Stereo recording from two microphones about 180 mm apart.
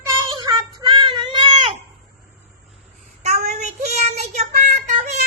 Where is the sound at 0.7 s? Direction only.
25° right (ahead or behind).